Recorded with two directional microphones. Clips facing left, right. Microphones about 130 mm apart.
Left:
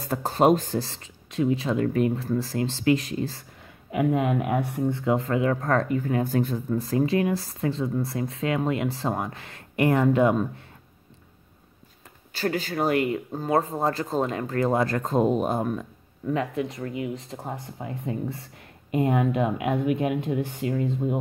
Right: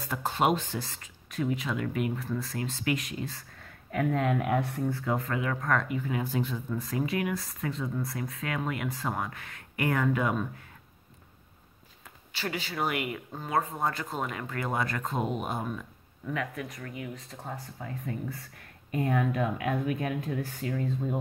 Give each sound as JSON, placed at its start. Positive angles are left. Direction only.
{"t": 0.0, "sound": "speech", "side_deg": 40}
{"t": 3.9, "sound": "speech", "side_deg": 15}
{"t": 12.3, "sound": "speech", "side_deg": 40}
{"t": 16.3, "sound": "speech", "side_deg": 25}